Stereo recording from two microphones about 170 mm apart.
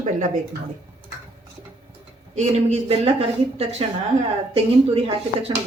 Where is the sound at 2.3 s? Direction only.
40° right (ahead or behind).